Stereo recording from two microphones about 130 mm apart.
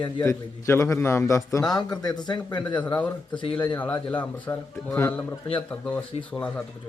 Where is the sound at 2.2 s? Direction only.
35° left (ahead or behind).